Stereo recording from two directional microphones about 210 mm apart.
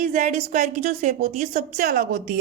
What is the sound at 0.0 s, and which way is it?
A woman's voice, 35° right (ahead or behind).